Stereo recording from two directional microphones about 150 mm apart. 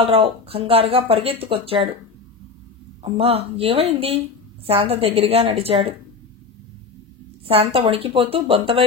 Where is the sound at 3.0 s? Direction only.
40° right (ahead or behind).